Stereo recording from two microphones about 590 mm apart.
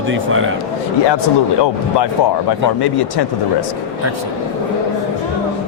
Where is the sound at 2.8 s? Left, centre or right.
Left.